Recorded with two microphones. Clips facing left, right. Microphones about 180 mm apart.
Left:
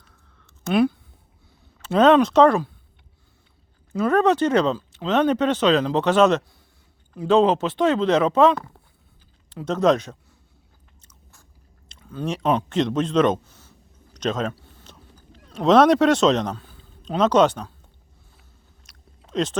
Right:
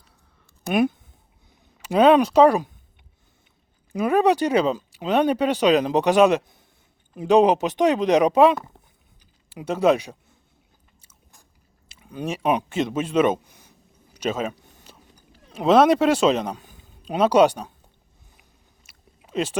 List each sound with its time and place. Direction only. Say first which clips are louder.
0.6 s speech: left 1 dB; 15° right (ahead or behind)
3.9 s speech: even; 10° right (ahead or behind)
11.0 s biting: left 1 dB; 15° right (ahead or behind)
11.9 s a sound: left 1 dB; 15° right (ahead or behind)
18.3 s chewing: left 2 dB; 10° right (ahead or behind)